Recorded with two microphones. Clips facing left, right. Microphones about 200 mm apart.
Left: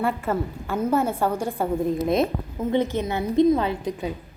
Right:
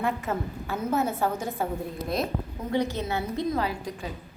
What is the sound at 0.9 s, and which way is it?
Speech, 10° left (ahead or behind).